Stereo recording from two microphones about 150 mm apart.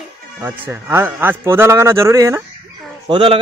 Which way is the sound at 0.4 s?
15° right (ahead or behind).